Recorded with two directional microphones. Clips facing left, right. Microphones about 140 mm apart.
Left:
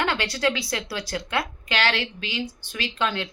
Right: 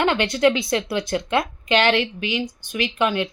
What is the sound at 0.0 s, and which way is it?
A woman's voice, 20° right (ahead or behind).